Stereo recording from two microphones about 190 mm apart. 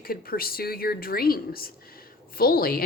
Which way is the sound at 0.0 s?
50° left (ahead or behind).